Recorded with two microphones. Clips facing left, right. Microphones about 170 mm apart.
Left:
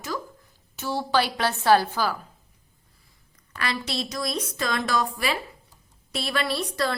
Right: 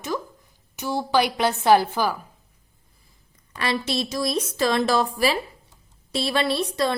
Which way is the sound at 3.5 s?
25° right (ahead or behind).